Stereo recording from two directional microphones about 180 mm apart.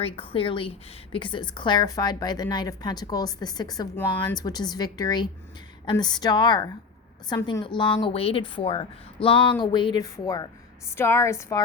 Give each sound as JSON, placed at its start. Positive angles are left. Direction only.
{"t": 0.0, "sound": "speech", "side_deg": 30}
{"t": 3.9, "sound": "a woman's voice", "side_deg": 10}
{"t": 4.4, "sound": "a woman's voice", "side_deg": 20}